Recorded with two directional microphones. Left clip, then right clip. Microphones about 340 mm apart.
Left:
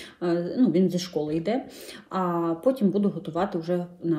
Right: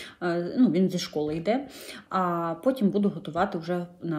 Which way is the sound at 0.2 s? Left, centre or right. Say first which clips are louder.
Left 1 dB; centre.